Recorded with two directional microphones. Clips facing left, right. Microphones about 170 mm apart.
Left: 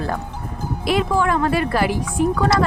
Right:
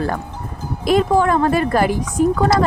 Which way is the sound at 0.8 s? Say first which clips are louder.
Right 4 dB; 45° right (ahead or behind).